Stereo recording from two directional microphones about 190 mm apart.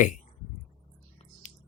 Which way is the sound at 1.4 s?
40° left (ahead or behind).